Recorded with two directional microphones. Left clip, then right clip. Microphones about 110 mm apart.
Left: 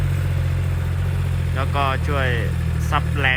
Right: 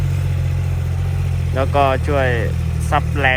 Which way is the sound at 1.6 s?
10° left (ahead or behind).